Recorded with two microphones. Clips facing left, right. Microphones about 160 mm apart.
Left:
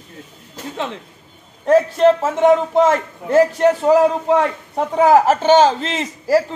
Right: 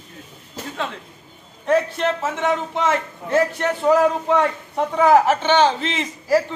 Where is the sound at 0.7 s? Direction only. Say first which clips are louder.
Left 3 dB; 20° left (ahead or behind).